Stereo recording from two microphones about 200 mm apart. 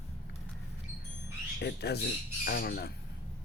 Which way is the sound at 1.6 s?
55° left (ahead or behind).